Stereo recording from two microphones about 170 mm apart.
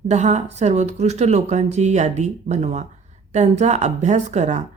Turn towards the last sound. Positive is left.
turn(degrees=-45)  # may be behind; listen again after turning